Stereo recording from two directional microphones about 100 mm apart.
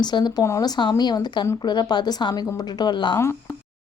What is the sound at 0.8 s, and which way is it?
Speech, 45° left (ahead or behind).